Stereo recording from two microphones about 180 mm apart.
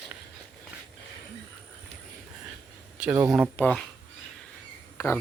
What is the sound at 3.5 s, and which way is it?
Speech, 5° left (ahead or behind).